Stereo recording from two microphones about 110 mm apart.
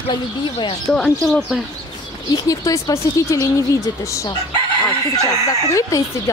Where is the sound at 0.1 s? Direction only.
45° left (ahead or behind).